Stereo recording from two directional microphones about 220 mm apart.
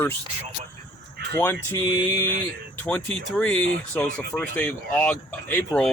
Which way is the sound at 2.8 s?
5° left (ahead or behind).